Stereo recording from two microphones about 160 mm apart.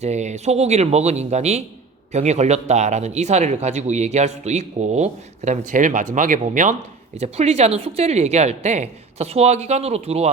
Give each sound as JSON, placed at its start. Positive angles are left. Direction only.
{"t": 0.0, "sound": "speech", "side_deg": -45}
{"t": 7.2, "sound": "a woman's voice", "side_deg": -40}